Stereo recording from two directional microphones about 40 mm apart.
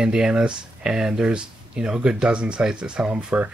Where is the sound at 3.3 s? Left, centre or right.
Right.